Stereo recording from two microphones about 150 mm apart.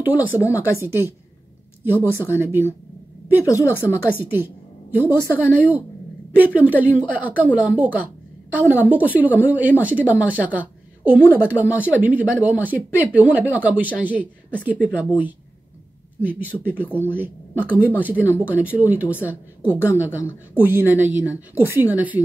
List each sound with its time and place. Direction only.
0.0 s speech: 10° right (ahead or behind)
0.4 s speech: 20° left (ahead or behind)
0.7 s speech: 15° right (ahead or behind)
3.4 s a woman's voice: 20° left (ahead or behind)
4.9 s speech: 15° right (ahead or behind)
16.7 s a woman's voice: 10° left (ahead or behind)
17.7 s speech: 10° right (ahead or behind)
19.1 s a woman's voice: 10° left (ahead or behind)
19.8 s speech: 10° right (ahead or behind)